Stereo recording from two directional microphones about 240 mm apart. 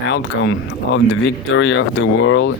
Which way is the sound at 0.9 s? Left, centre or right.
Left.